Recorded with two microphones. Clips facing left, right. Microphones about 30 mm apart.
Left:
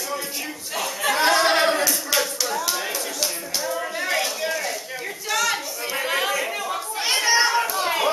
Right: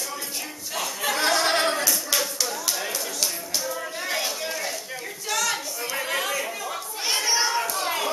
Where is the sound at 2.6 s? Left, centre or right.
Centre.